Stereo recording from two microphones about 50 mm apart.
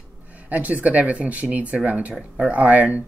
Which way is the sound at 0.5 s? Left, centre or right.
Right.